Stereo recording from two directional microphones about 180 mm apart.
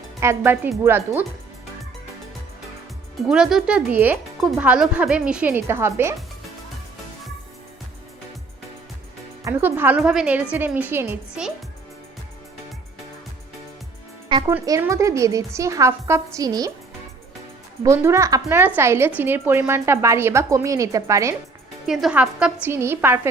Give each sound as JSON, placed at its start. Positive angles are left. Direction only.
{"t": 0.2, "sound": "speech", "side_deg": -15}
{"t": 3.2, "sound": "speech", "side_deg": -5}
{"t": 9.4, "sound": "speech", "side_deg": -10}
{"t": 14.3, "sound": "music", "side_deg": -25}
{"t": 14.5, "sound": "speech", "side_deg": -15}
{"t": 17.8, "sound": "speech", "side_deg": -15}
{"t": 21.8, "sound": "speech", "side_deg": -5}